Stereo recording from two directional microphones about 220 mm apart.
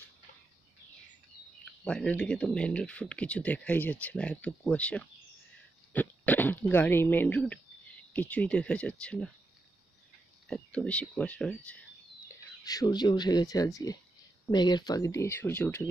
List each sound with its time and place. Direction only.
1.6 s speech: 5° left (ahead or behind)
10.5 s speech: 5° left (ahead or behind)
12.3 s speech: 15° left (ahead or behind)